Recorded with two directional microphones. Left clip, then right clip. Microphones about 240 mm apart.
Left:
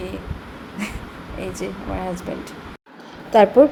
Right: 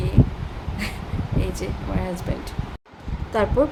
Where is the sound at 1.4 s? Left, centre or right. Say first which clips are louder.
Left 4 dB; centre.